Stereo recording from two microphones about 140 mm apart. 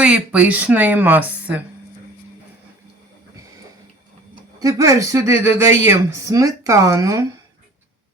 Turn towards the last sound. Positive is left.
turn(degrees=-25)  # may be behind; listen again after turning